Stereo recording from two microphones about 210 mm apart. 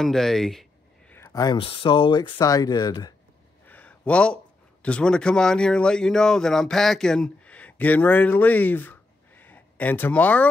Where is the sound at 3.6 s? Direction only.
5° left (ahead or behind).